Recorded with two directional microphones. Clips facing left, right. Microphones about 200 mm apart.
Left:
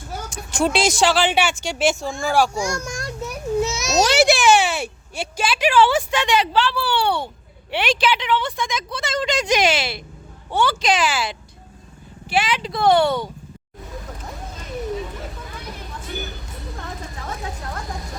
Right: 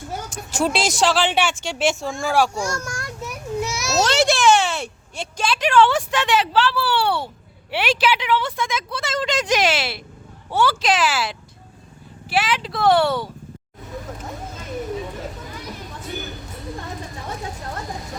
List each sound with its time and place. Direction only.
0.3 s speech: centre (ahead or behind)
2.6 s a child's voice: 15° left (ahead or behind)
4.1 s a woman's voice: 5° left (ahead or behind)